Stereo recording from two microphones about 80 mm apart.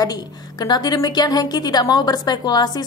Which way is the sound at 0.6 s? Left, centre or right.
Left.